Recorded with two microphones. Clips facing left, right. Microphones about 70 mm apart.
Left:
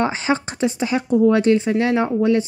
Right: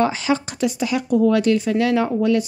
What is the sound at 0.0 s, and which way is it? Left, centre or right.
Speech, left.